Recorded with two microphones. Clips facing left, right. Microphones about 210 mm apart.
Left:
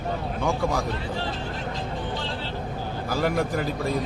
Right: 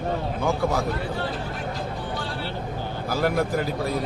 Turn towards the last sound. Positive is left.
turn(degrees=0)  # may be behind; listen again after turning